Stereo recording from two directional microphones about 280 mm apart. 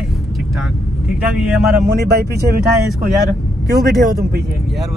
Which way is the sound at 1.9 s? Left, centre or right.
Right.